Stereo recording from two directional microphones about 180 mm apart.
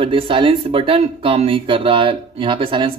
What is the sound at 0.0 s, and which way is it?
Speech, 30° right (ahead or behind).